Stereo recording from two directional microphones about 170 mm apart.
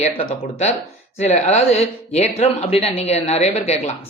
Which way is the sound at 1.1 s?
40° left (ahead or behind).